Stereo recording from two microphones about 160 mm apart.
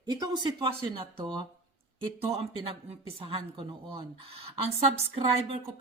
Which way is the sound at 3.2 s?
35° right (ahead or behind).